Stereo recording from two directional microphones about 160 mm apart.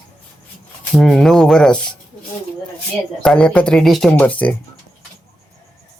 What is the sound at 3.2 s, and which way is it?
Speech, 5° left (ahead or behind).